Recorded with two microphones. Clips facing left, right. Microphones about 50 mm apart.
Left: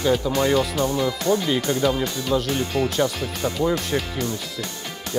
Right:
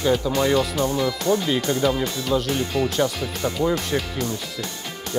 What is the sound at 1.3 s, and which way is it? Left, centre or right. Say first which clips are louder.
Speech: even; centre.